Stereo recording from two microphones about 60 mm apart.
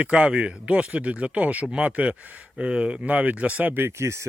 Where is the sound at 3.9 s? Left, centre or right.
Right.